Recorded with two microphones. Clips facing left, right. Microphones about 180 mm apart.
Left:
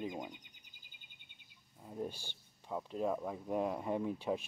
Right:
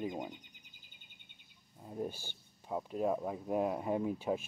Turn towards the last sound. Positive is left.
turn(degrees=-5)  # may be behind; listen again after turning